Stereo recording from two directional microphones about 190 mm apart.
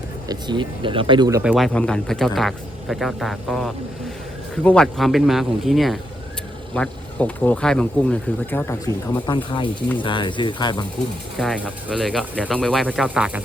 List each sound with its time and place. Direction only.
0.3 s speech: 25° right (ahead or behind)
1.4 s speech: 5° right (ahead or behind); by 10.8 s 25° left (ahead or behind)
11.3 s speech: centre (ahead or behind)